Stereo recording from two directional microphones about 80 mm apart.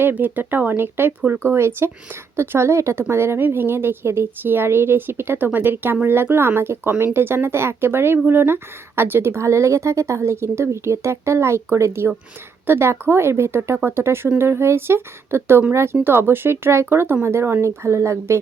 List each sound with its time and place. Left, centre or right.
0.0 s a woman's voice: right